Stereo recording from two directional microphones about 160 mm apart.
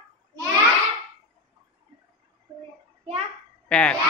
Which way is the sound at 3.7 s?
5° left (ahead or behind).